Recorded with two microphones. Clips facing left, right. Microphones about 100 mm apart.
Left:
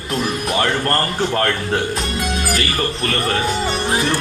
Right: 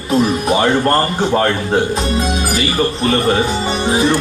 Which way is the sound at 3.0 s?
20° right (ahead or behind).